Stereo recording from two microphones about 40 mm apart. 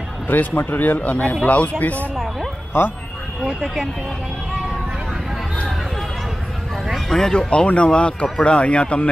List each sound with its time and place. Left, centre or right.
0.3 s speech: left
2.7 s speech: left
7.1 s speech: centre
7.4 s speech: left